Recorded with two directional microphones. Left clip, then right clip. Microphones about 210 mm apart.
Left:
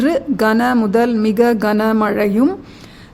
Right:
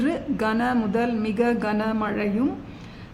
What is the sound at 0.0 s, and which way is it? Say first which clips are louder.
A woman's voice: left 9 dB; 45° left (ahead or behind).